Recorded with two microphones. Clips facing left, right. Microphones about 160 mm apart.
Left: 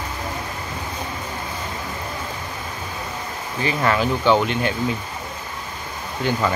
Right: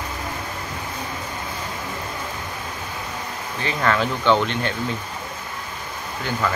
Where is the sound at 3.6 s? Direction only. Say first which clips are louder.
Left 1 dB; 10° left (ahead or behind).